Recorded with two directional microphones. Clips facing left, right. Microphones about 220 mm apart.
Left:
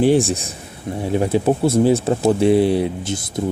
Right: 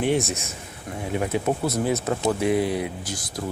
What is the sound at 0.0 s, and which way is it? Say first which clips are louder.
Speech: left 8 dB; 30° left (ahead or behind).